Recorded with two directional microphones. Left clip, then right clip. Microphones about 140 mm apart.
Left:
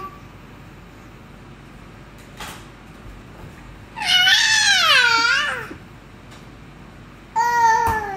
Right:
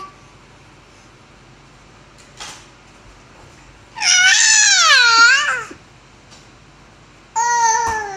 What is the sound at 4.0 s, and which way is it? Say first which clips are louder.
Cat: right 3 dB; 15° left (ahead or behind).